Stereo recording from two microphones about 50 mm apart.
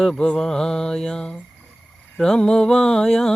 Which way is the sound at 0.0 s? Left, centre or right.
Centre.